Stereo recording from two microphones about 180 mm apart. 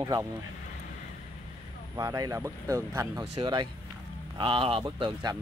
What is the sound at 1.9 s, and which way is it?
Speech, 20° right (ahead or behind).